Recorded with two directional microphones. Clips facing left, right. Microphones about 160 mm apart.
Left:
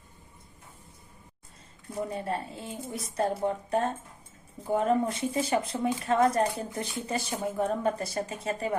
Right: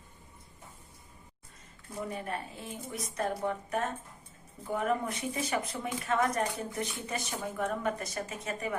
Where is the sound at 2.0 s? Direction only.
30° left (ahead or behind).